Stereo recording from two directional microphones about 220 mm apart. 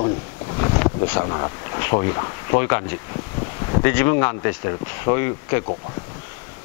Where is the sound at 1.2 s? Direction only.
25° left (ahead or behind).